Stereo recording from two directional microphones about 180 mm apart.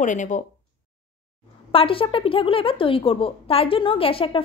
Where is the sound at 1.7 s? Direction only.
30° left (ahead or behind).